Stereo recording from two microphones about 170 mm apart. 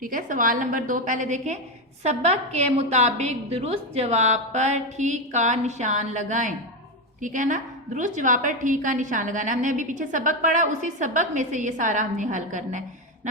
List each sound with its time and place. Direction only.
0.0 s a woman's voice: 55° right (ahead or behind)